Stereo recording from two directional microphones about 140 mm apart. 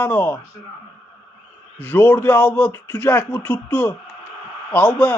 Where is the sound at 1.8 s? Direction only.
15° left (ahead or behind).